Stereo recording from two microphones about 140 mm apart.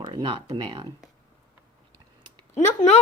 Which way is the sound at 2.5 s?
55° left (ahead or behind).